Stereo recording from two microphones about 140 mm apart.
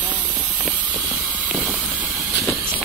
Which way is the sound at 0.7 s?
5° right (ahead or behind).